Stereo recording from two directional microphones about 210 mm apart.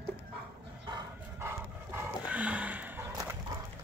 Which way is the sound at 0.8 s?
15° right (ahead or behind).